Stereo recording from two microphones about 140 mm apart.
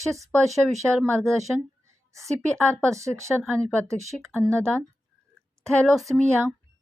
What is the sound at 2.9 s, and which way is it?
Speech, 20° right (ahead or behind).